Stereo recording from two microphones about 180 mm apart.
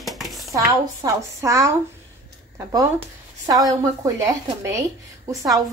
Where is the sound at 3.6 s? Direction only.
20° right (ahead or behind).